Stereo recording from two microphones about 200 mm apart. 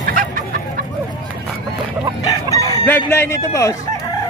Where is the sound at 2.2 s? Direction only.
15° left (ahead or behind).